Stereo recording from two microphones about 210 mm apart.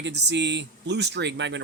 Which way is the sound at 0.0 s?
55° right (ahead or behind).